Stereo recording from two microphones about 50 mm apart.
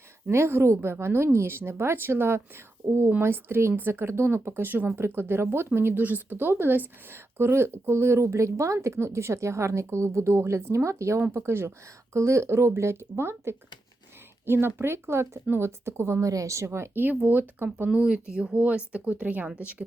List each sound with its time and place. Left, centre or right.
0.3 s speech: right
2.8 s speech: right
3.2 s speech: right
4.9 s speech: right
6.0 s speech: right
10.8 s speech: right
11.3 s speech: right
12.1 s speech: right
16.2 s speech: right
16.9 s speech: right
17.8 s speech: right